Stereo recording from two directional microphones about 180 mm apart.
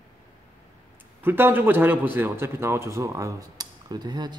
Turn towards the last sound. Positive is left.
turn(degrees=-25)  # may be behind; listen again after turning